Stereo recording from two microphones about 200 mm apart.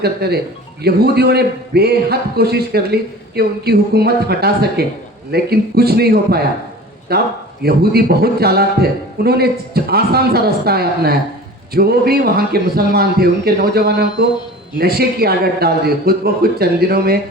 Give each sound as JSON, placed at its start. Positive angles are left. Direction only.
{"t": 0.0, "sound": "a man's voice", "side_deg": -55}